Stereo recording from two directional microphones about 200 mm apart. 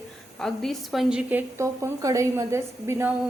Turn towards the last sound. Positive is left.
turn(degrees=-10)  # may be behind; listen again after turning